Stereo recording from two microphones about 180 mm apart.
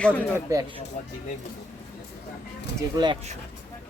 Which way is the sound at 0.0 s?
10° left (ahead or behind).